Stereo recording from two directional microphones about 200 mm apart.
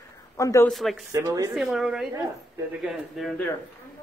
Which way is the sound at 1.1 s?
20° right (ahead or behind).